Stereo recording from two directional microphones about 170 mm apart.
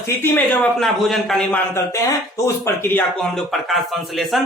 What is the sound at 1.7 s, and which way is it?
Speech, 15° left (ahead or behind).